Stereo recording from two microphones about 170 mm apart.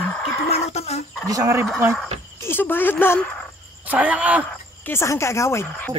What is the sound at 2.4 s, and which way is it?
Frog, 10° left (ahead or behind).